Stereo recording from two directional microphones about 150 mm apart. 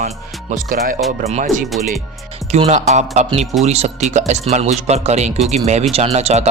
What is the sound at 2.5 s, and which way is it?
Speech, 45° right (ahead or behind).